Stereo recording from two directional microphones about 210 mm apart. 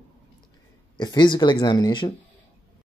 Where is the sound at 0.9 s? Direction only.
20° left (ahead or behind).